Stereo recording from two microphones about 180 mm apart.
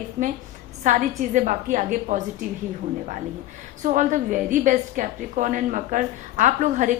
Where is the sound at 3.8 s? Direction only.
45° right (ahead or behind).